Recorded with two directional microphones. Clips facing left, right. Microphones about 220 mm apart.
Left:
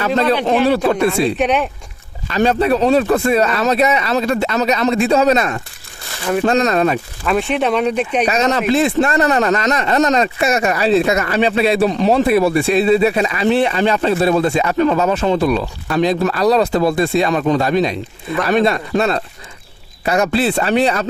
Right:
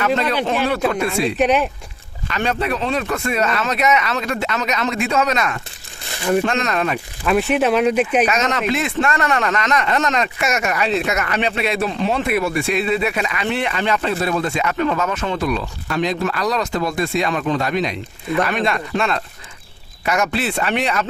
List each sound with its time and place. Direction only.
0.0 s speech: 35° left (ahead or behind)
1.4 s speech: centre (ahead or behind)
2.3 s speech: 35° left (ahead or behind)
7.3 s speech: 5° right (ahead or behind)
8.2 s speech: 35° left (ahead or behind)